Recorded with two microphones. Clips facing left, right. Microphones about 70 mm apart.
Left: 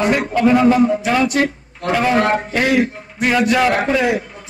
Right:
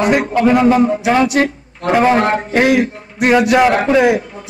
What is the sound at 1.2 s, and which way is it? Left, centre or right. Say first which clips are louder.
Speech: right 3 dB; right.